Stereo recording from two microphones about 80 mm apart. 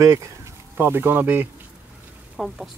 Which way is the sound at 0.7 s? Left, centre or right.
Right.